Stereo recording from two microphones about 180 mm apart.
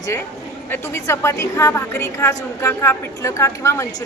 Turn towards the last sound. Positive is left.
turn(degrees=15)  # may be behind; listen again after turning